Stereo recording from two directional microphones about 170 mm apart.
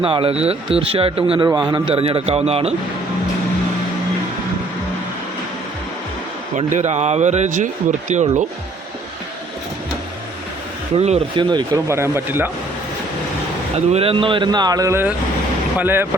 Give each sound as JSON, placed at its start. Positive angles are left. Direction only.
{"t": 0.0, "sound": "speech", "side_deg": -35}
{"t": 6.6, "sound": "a man's voice", "side_deg": -45}
{"t": 10.9, "sound": "speech", "side_deg": -40}
{"t": 11.3, "sound": "speech", "side_deg": -25}
{"t": 13.7, "sound": "speech", "side_deg": -35}